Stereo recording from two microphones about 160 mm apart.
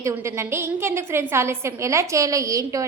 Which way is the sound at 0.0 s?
20° right (ahead or behind).